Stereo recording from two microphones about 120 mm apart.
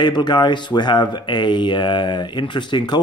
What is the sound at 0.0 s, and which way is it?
Speech, 35° left (ahead or behind).